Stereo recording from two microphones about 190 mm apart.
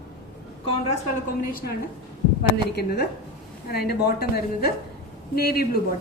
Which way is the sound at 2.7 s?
55° left (ahead or behind).